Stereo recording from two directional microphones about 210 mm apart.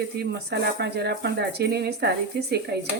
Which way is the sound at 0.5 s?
50° right (ahead or behind).